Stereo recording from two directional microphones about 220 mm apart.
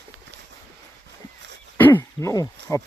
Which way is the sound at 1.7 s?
10° left (ahead or behind).